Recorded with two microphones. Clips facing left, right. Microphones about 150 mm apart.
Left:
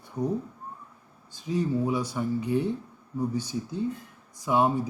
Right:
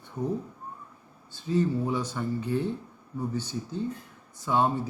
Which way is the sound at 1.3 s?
15° left (ahead or behind).